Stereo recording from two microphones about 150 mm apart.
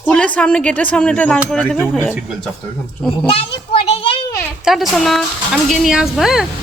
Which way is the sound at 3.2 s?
40° left (ahead or behind).